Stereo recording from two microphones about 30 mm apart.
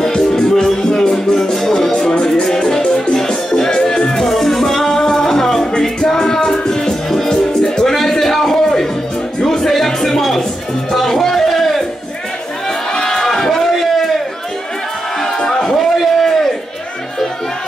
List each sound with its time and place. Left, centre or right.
0.0 s music: left
1.9 s music: left
5.7 s music: left
7.8 s a sound: centre
9.4 s music: centre
12.6 s crowd: left
13.1 s a sound: centre
15.1 s music: centre
15.7 s a sound: centre